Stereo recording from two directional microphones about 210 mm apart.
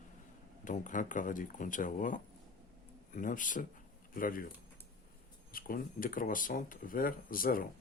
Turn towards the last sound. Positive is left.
turn(degrees=45)  # may be behind; listen again after turning